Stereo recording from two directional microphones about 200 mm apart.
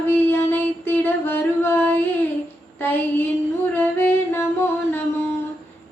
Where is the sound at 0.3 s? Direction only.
10° left (ahead or behind).